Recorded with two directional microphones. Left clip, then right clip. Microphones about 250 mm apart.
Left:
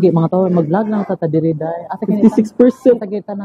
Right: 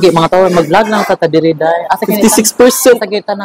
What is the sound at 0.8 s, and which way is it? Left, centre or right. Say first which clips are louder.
Speech: right 9 dB; centre.